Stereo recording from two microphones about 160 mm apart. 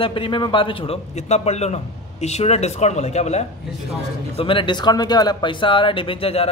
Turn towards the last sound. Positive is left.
turn(degrees=35)  # may be behind; listen again after turning